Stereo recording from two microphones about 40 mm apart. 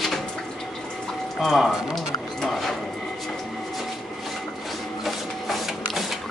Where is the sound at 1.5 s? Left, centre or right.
Centre.